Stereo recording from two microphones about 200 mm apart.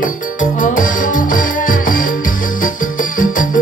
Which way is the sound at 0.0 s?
40° left (ahead or behind).